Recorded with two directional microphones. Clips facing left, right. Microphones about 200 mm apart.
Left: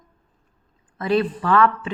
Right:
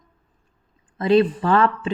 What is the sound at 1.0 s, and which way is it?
Speech, 25° right (ahead or behind).